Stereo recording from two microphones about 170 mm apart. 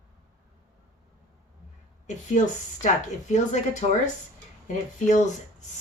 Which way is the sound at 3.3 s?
45° left (ahead or behind).